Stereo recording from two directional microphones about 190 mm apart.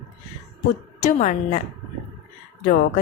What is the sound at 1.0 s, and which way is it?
Speech, 40° left (ahead or behind).